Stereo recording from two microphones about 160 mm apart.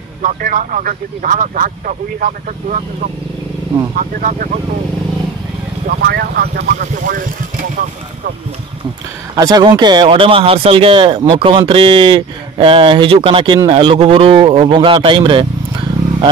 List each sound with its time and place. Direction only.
0.2 s speech: 55° right (ahead or behind)
5.9 s speech: 90° right
6.8 s speech: 60° right (ahead or behind)
9.3 s speech: 25° right (ahead or behind)